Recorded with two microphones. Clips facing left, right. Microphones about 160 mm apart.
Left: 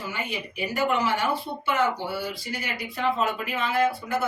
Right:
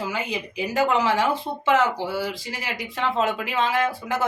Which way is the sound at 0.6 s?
90° right.